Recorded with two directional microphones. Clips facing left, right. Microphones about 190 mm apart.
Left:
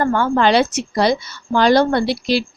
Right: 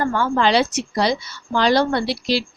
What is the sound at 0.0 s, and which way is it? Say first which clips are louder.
A woman's voice: left 3 dB; 55° left (ahead or behind).